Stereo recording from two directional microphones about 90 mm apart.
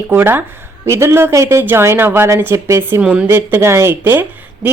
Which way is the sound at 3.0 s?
10° right (ahead or behind).